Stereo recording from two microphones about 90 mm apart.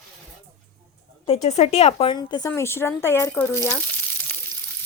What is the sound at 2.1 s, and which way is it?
Speech, 50° left (ahead or behind).